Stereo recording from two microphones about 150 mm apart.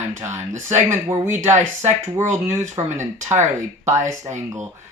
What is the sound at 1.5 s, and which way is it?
Speech, 50° right (ahead or behind).